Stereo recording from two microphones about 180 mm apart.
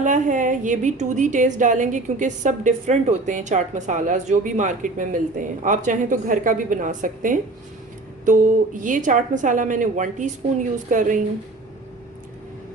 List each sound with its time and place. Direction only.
0.0 s a woman's voice: 45° right (ahead or behind)